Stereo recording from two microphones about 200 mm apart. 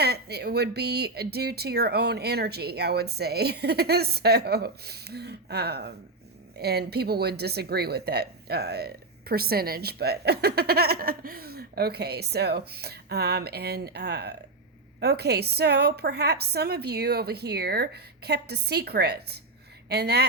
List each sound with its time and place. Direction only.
0.0 s a woman's voice: 55° right (ahead or behind)